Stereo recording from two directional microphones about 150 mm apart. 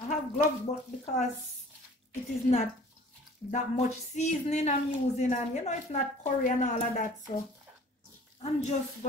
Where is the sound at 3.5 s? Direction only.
50° left (ahead or behind).